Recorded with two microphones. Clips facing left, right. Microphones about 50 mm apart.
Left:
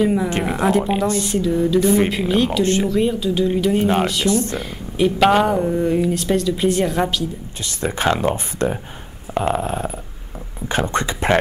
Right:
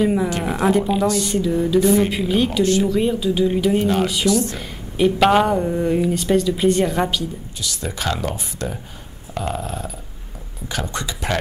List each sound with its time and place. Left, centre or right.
0.0 s speech: centre
4.3 s speech: left
4.6 s speech: centre
7.6 s speech: left